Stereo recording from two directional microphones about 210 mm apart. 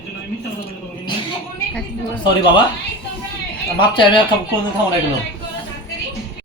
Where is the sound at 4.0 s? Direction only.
25° left (ahead or behind).